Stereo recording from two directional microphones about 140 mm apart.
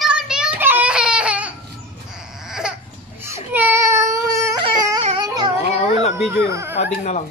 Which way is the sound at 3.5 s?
15° right (ahead or behind).